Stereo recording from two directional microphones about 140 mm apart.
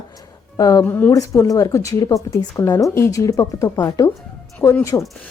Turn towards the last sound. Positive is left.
turn(degrees=20)  # may be behind; listen again after turning